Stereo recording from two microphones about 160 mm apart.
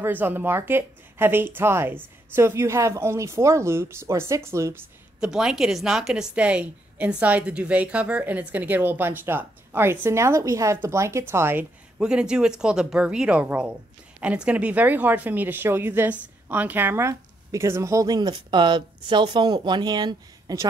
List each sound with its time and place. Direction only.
0.0 s speech: 10° right (ahead or behind)
5.2 s speech: 5° right (ahead or behind); by 20.6 s 25° right (ahead or behind)